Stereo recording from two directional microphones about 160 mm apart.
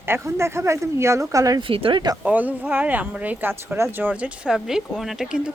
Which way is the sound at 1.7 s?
35° right (ahead or behind).